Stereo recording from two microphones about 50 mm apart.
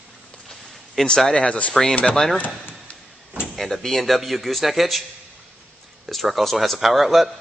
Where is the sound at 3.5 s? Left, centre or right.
Centre.